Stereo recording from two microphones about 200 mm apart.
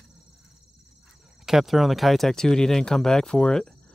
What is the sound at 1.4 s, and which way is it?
Speech, centre (ahead or behind).